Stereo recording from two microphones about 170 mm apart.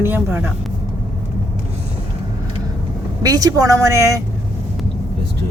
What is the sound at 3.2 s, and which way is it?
A woman's voice, 20° right (ahead or behind).